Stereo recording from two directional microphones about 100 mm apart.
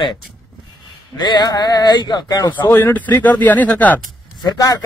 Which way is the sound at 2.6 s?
25° left (ahead or behind).